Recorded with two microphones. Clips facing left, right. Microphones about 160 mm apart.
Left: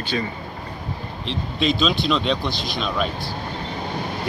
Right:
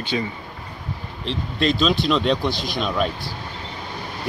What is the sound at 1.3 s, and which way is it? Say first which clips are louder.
Speech: right 1 dB; centre (ahead or behind).